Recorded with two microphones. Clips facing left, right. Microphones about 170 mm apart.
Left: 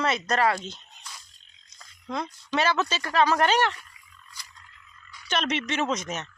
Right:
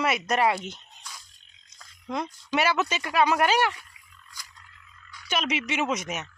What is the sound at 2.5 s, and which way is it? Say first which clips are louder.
Speech: even; 15° right (ahead or behind).